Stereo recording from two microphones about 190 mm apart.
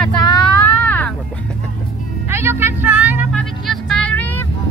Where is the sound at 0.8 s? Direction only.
5° left (ahead or behind).